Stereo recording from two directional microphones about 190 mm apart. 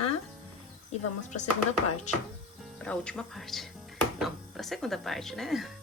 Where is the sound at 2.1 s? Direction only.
40° left (ahead or behind).